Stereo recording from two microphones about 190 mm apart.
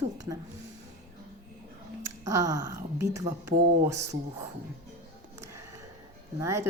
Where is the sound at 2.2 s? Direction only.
15° right (ahead or behind).